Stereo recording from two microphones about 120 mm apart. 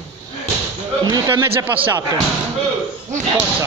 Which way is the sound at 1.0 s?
30° right (ahead or behind).